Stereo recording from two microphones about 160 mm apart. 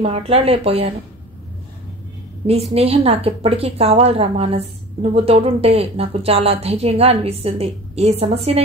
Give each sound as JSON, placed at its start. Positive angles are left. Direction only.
{"t": 0.0, "sound": "a woman's voice", "side_deg": -40}
{"t": 2.7, "sound": "a woman's voice", "side_deg": -40}